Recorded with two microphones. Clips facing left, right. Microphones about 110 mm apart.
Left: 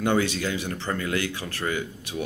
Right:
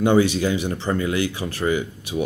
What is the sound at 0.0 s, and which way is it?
Speech, 15° right (ahead or behind).